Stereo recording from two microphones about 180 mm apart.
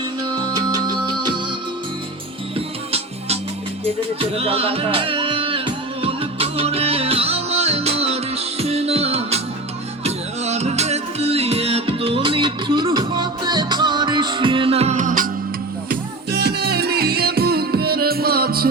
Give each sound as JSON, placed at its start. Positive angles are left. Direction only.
{"t": 0.5, "sound": "music", "side_deg": -25}
{"t": 2.6, "sound": "music", "side_deg": -35}
{"t": 15.9, "sound": "music", "side_deg": -60}